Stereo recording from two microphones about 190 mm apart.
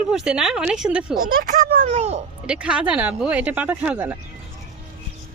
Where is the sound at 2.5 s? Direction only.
5° right (ahead or behind).